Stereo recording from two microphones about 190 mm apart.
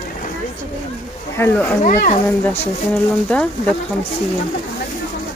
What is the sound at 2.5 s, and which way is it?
Speech, 5° left (ahead or behind).